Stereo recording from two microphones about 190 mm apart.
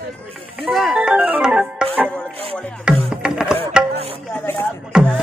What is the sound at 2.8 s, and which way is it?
Music, 5° right (ahead or behind).